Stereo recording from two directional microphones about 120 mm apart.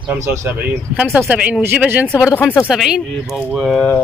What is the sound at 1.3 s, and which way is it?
Speech, 10° right (ahead or behind).